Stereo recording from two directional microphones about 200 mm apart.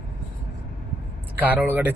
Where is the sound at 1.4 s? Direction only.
10° right (ahead or behind).